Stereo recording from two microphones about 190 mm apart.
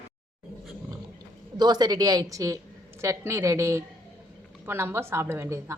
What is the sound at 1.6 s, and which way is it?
A woman's voice, 20° right (ahead or behind).